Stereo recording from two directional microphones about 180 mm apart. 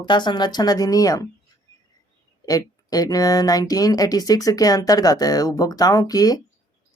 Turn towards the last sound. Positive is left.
turn(degrees=20)  # may be behind; listen again after turning